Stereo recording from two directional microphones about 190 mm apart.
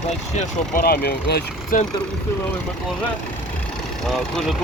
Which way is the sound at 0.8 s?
55° left (ahead or behind).